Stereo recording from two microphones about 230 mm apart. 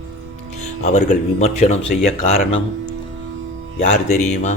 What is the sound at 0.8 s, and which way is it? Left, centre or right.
Speech, left.